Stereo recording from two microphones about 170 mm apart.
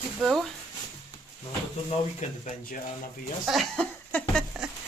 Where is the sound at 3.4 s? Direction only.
Centre (ahead or behind).